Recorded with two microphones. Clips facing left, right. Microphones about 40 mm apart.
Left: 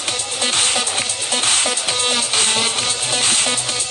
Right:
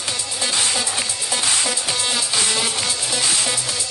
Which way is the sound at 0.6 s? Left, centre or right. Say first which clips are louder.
Left 2 dB; left.